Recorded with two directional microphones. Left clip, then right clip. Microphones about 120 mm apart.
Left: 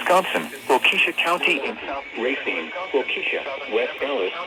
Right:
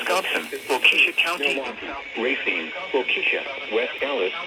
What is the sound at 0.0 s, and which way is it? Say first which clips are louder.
Speech: left 4 dB; 35° left (ahead or behind).